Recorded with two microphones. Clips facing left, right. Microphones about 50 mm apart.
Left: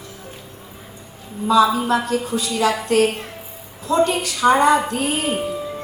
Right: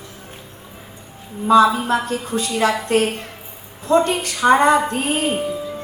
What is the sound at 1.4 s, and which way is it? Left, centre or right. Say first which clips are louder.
A woman's voice: right 2 dB; right.